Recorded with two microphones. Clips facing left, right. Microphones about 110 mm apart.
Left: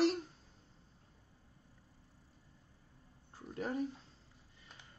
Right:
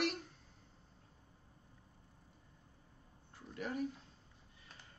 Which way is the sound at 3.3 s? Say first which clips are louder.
Left 3 dB; 30° left (ahead or behind).